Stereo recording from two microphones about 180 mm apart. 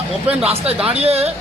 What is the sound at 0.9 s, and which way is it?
Speech, 35° right (ahead or behind).